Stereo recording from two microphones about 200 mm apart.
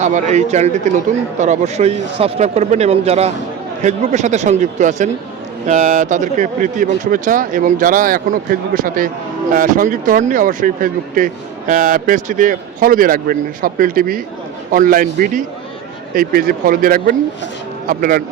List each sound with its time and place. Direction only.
0.0 s speech: 35° right (ahead or behind)